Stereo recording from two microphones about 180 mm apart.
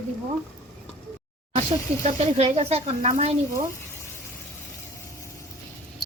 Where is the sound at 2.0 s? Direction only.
35° right (ahead or behind).